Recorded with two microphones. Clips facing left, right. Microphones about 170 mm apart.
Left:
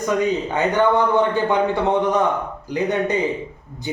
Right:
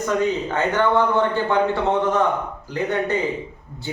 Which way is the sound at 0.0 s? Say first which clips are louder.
Left 1 dB; 15° left (ahead or behind).